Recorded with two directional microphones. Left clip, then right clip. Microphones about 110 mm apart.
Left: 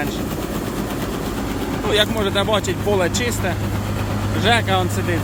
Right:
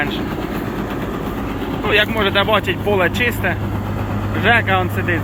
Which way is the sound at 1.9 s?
25° left (ahead or behind).